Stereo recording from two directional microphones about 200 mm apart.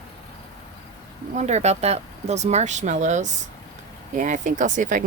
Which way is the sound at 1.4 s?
35° right (ahead or behind).